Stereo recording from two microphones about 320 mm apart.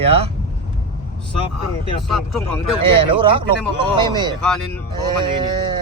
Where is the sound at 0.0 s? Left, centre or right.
Centre.